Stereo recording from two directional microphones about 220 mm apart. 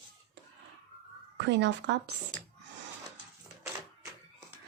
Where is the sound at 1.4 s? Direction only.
50° right (ahead or behind).